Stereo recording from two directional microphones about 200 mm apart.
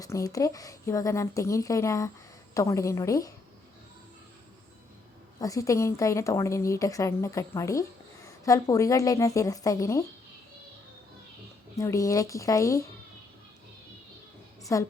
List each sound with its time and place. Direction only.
0.0 s a woman's voice: 15° left (ahead or behind)
5.4 s a woman's voice: 15° left (ahead or behind)
11.8 s a woman's voice: 15° left (ahead or behind)
14.6 s a woman's voice: 15° left (ahead or behind)